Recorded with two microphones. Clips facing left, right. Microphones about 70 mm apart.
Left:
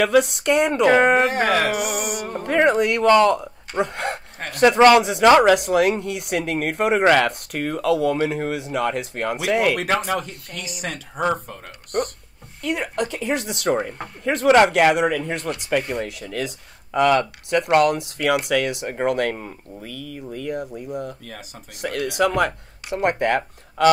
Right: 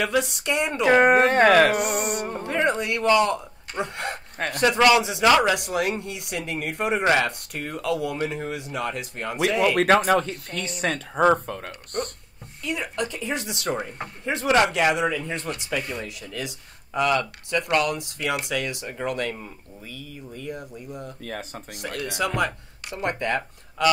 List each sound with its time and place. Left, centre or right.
0.0 s speech: left
1.1 s speech: right
1.8 s music: centre
2.4 s speech: left
4.4 s speech: right
4.8 s speech: left
9.8 s speech: right
10.5 s speech: left
10.8 s speech: right
12.6 s speech: left
21.2 s speech: right
21.8 s speech: left